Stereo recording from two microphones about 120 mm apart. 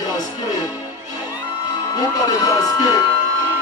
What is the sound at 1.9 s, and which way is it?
Speech, 30° left (ahead or behind).